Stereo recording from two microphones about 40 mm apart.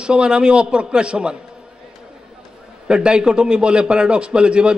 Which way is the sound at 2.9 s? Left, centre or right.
Right.